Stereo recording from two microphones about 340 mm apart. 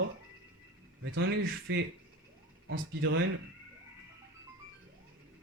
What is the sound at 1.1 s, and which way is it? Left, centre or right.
Speech, right.